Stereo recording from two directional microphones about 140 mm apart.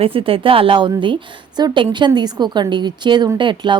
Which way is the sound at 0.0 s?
40° right (ahead or behind).